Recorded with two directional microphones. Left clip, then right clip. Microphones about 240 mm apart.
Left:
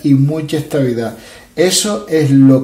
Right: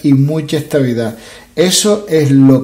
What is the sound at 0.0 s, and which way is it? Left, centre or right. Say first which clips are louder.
A man's voice: right 1 dB; right.